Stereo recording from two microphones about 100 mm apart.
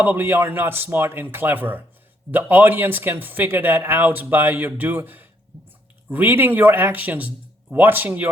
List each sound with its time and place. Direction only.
0.0 s speech: 20° right (ahead or behind)